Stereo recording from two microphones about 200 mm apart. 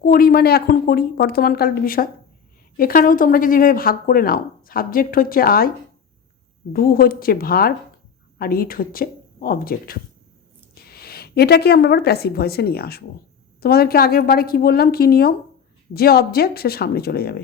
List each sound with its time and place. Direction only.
0.0 s speech: 45° left (ahead or behind)
6.7 s speech: 45° left (ahead or behind)